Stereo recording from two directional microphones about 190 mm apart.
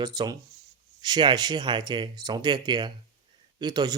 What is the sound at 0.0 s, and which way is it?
Speech, 20° right (ahead or behind).